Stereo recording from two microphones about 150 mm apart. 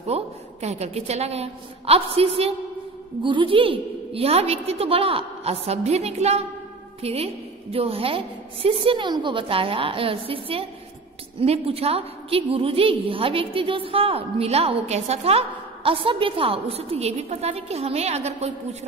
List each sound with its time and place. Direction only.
0.0 s a woman's voice: 45° right (ahead or behind)